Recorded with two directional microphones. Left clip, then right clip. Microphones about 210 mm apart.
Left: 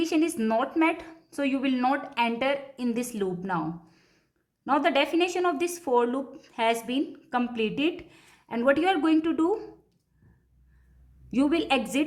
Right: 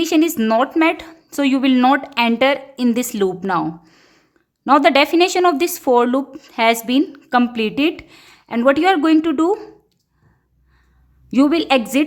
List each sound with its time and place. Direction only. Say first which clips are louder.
0.0 s speech: right 9 dB; 35° right (ahead or behind)
11.3 s speech: right 10 dB; 35° right (ahead or behind)